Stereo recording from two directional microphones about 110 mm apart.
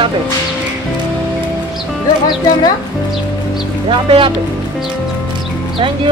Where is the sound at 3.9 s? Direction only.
50° right (ahead or behind).